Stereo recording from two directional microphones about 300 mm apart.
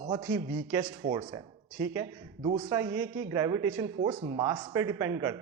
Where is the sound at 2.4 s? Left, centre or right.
Right.